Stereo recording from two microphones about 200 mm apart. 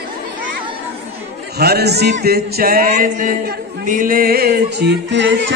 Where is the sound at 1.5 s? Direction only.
50° right (ahead or behind).